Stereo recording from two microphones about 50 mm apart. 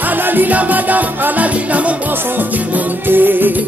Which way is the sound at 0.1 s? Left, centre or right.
Right.